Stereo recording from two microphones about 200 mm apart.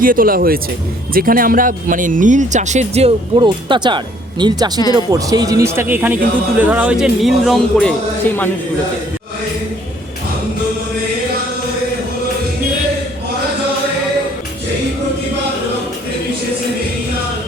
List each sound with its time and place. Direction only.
0.0 s speech: 45° right (ahead or behind); by 8.4 s 10° left (ahead or behind)